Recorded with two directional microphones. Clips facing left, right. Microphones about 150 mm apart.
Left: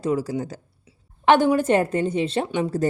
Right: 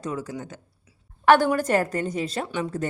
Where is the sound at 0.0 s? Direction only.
30° left (ahead or behind).